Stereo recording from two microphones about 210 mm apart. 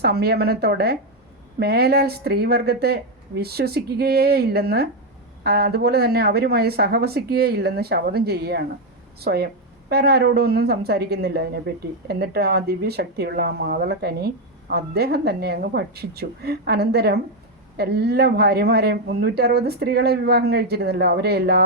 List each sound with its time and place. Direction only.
0.0 s speech: 50° right (ahead or behind)